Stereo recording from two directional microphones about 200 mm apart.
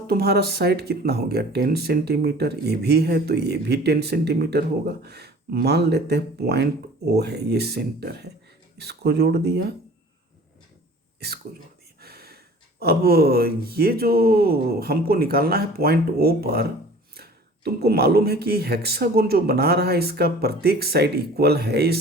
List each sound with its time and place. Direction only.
0.1 s speech: 50° right (ahead or behind)
11.9 s a sound: 50° right (ahead or behind)
12.8 s speech: 50° right (ahead or behind)